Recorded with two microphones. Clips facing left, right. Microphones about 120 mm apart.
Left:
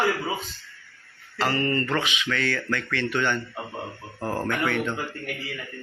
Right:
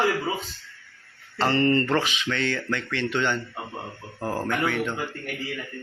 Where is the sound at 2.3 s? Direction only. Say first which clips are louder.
Even; 20° right (ahead or behind).